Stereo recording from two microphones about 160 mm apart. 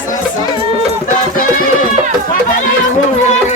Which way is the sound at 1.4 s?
60° left (ahead or behind).